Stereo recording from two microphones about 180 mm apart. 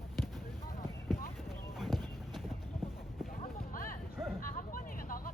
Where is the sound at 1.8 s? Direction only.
Centre (ahead or behind).